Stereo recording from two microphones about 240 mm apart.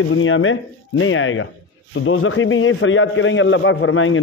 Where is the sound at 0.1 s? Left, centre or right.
Left.